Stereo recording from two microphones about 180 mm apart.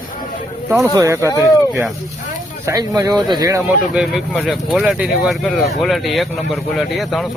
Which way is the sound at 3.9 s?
Centre (ahead or behind).